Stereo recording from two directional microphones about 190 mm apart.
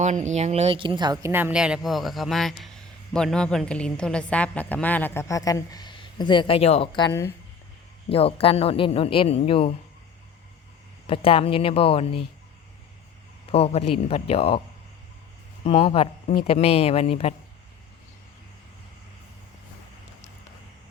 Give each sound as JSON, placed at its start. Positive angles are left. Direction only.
{"t": 0.0, "sound": "a woman's voice", "side_deg": -40}
{"t": 8.1, "sound": "speech", "side_deg": 30}
{"t": 11.0, "sound": "speech", "side_deg": 30}
{"t": 13.5, "sound": "a man's voice", "side_deg": 30}
{"t": 15.6, "sound": "a man's voice", "side_deg": 30}